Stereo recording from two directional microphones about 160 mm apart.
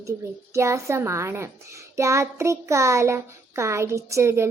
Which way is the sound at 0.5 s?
15° right (ahead or behind).